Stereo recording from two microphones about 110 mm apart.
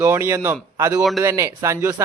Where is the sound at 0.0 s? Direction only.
25° right (ahead or behind).